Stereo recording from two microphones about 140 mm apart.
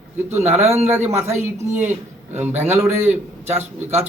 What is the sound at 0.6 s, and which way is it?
Speech, 45° right (ahead or behind).